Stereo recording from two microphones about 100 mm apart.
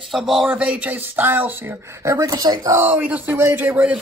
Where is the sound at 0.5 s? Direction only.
15° right (ahead or behind); by 2.7 s 40° right (ahead or behind).